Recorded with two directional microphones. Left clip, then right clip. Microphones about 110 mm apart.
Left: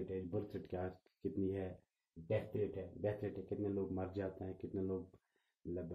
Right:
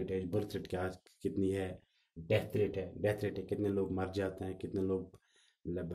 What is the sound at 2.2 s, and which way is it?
Speech, 20° left (ahead or behind).